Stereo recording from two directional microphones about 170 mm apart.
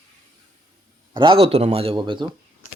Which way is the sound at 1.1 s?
30° right (ahead or behind).